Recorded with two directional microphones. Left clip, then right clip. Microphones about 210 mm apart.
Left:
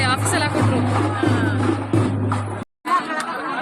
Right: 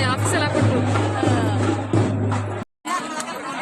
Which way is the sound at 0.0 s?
5° left (ahead or behind).